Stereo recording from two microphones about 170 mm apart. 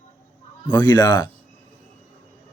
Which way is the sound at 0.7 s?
25° left (ahead or behind).